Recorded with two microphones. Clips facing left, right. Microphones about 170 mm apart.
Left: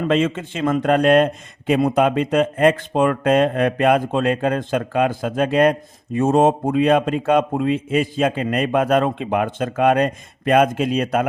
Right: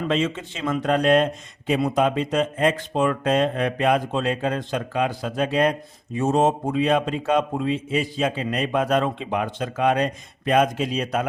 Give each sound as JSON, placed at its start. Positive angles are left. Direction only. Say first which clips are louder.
{"t": 0.1, "sound": "a man's voice", "louder": "left 5 dB", "side_deg": 55}